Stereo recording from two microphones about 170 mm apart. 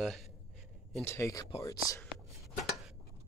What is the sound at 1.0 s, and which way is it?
Speech, 15° left (ahead or behind).